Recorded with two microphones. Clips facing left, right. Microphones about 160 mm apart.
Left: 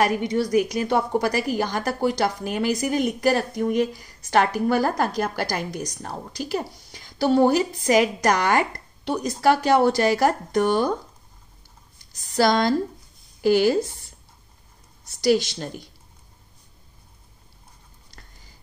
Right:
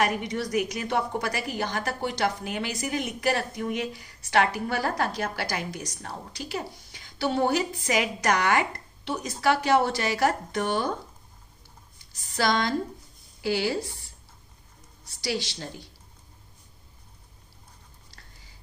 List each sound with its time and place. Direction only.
0.0 s a woman's voice: 35° left (ahead or behind)
12.2 s a woman's voice: 40° left (ahead or behind)